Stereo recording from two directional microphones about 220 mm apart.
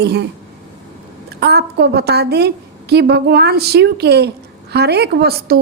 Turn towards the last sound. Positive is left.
turn(degrees=-45)  # may be behind; listen again after turning